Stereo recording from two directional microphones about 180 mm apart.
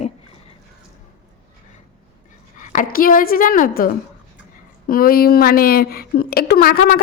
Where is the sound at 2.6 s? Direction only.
45° left (ahead or behind).